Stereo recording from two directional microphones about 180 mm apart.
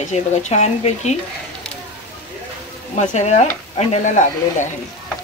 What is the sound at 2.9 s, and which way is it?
Speech, 40° left (ahead or behind).